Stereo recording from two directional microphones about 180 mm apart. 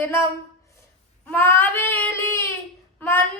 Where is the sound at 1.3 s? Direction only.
10° left (ahead or behind).